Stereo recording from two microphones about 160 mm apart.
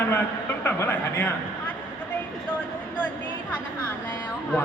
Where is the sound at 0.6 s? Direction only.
15° left (ahead or behind).